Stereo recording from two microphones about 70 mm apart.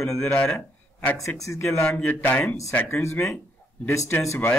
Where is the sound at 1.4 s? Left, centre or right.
Left.